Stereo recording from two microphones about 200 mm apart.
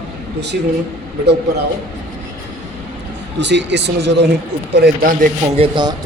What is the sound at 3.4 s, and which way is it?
A man's voice, 60° right (ahead or behind).